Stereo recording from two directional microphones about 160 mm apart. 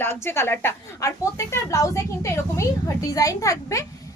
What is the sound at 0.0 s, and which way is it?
A woman's voice, 15° left (ahead or behind).